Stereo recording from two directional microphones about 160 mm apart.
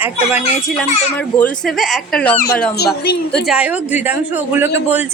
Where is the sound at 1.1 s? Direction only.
10° left (ahead or behind).